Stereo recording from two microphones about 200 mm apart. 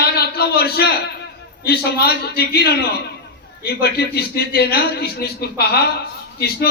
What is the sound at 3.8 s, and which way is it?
A man's voice, 50° left (ahead or behind).